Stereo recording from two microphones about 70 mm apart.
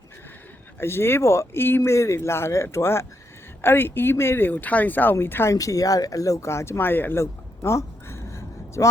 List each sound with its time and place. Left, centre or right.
0.8 s speech: left
5.5 s speech: left